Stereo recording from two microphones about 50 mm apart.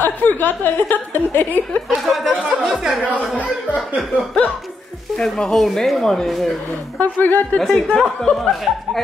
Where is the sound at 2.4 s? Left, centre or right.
Centre.